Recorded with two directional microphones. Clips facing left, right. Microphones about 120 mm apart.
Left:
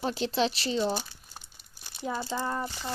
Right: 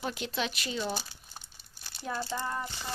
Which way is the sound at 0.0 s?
30° left (ahead or behind).